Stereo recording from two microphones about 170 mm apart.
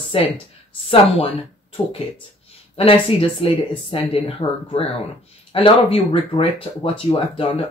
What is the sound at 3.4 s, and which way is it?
Speech, 35° left (ahead or behind).